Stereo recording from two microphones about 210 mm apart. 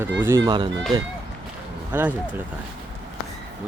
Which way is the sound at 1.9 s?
10° right (ahead or behind).